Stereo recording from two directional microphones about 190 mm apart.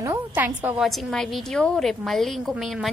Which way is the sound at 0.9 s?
Centre (ahead or behind).